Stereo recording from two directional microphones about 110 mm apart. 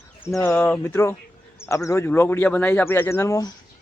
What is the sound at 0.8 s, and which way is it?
Speech, 20° left (ahead or behind).